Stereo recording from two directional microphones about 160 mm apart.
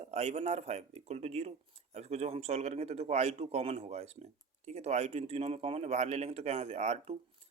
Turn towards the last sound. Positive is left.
turn(degrees=-40)  # may be behind; listen again after turning